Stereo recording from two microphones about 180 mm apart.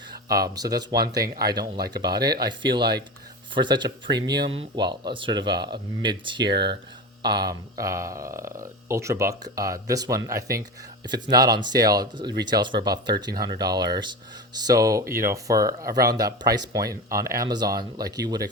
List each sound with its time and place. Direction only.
0.1 s speech: 20° right (ahead or behind)
6.5 s speech: 65° right (ahead or behind)
7.2 s speech: 25° right (ahead or behind)